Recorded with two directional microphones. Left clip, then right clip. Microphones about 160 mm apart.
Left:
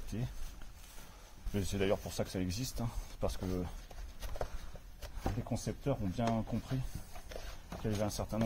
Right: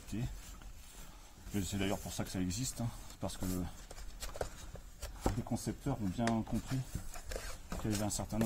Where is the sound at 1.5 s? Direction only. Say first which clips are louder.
Left 4 dB; 40° left (ahead or behind).